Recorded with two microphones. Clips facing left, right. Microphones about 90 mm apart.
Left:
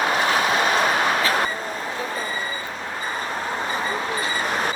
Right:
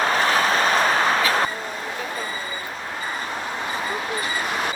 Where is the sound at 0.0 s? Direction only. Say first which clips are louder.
Right 1 dB; 35° right (ahead or behind).